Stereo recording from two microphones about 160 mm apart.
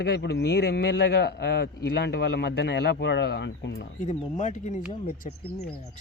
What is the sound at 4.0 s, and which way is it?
Speech, 50° left (ahead or behind).